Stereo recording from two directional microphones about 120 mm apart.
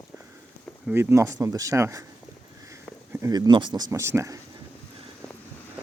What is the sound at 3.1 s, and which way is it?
Speech, 25° right (ahead or behind).